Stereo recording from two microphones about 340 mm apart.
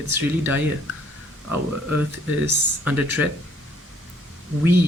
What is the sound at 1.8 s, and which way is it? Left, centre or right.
Speech, centre.